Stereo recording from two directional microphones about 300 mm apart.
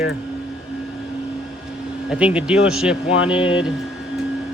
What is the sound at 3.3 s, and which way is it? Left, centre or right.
Speech, centre.